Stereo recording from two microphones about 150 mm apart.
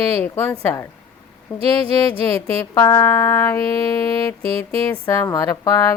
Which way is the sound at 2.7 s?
20° left (ahead or behind).